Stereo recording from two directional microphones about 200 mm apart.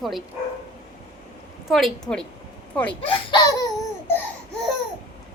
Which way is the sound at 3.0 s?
25° left (ahead or behind).